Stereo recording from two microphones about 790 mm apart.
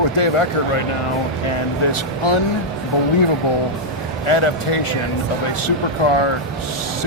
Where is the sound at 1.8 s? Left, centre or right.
Left.